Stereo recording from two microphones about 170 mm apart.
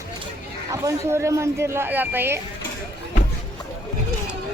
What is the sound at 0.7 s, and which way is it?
Speech, 15° right (ahead or behind).